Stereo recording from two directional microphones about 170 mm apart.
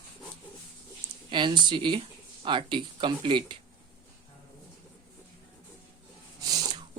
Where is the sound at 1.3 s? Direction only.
25° right (ahead or behind).